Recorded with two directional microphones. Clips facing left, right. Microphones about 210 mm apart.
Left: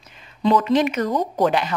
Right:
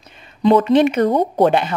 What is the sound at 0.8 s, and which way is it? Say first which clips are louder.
Speech: right 6 dB; 30° right (ahead or behind).